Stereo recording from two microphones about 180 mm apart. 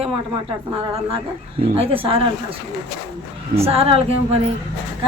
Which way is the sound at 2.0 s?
30° right (ahead or behind).